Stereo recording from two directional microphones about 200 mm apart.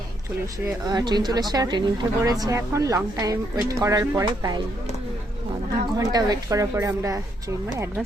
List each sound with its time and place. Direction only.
0.9 s speech: 20° right (ahead or behind)
6.0 s speech: 20° right (ahead or behind)